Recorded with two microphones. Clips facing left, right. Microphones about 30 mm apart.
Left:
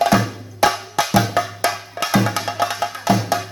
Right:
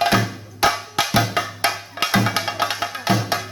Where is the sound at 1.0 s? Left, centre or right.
Right.